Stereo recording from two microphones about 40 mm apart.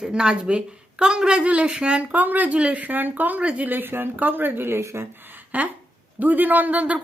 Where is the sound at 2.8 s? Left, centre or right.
Right.